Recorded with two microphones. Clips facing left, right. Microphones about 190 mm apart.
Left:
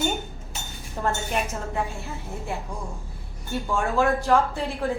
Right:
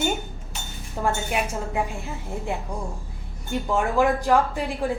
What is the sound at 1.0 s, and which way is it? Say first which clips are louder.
Speech: right 1 dB; 10° right (ahead or behind).